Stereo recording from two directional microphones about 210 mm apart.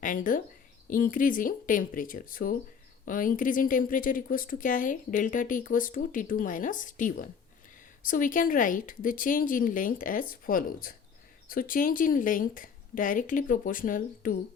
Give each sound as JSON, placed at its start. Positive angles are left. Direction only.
{"t": 0.0, "sound": "speech", "side_deg": 40}